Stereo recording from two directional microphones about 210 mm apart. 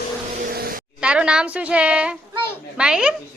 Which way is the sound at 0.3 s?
45° right (ahead or behind).